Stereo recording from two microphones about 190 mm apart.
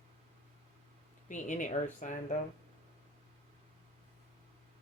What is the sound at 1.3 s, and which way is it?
Speech, 40° left (ahead or behind).